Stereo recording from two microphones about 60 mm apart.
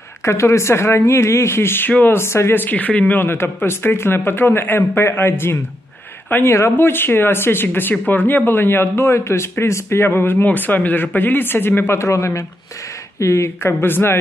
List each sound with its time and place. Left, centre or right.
0.2 s speech: left
1.9 s speech: left
2.1 s speech: left
3.3 s speech: left
12.0 s speech: left